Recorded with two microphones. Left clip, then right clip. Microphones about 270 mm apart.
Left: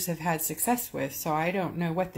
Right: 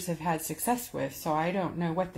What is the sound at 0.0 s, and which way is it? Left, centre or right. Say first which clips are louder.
A woman's voice: left 1 dB; centre.